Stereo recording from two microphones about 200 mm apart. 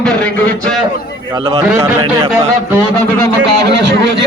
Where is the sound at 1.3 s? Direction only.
20° right (ahead or behind).